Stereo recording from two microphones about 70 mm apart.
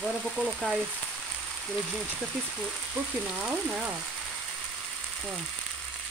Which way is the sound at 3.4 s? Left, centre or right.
Centre.